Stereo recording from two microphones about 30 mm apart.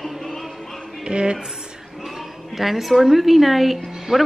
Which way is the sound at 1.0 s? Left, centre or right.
Right.